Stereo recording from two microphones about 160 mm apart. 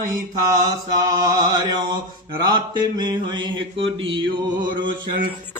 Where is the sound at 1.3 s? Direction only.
25° right (ahead or behind).